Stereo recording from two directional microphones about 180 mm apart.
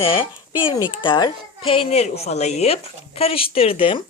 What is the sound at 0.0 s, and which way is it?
A woman's voice, 30° left (ahead or behind).